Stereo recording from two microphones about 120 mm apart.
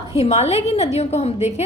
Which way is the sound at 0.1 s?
60° left (ahead or behind).